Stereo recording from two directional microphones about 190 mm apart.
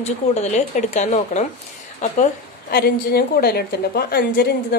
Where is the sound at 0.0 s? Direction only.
35° left (ahead or behind).